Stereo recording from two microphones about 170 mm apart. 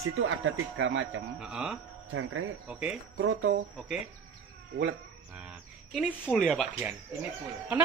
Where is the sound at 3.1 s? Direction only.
90° right.